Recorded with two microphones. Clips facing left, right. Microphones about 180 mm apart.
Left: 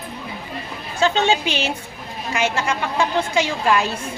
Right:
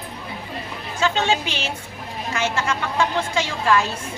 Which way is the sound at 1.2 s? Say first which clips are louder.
Left 3 dB; 20° left (ahead or behind).